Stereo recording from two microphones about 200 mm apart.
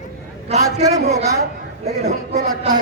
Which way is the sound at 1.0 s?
35° right (ahead or behind).